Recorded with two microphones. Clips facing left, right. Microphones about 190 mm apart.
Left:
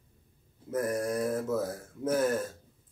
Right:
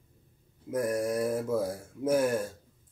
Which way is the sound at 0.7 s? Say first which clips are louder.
Right 1 dB; 10° right (ahead or behind).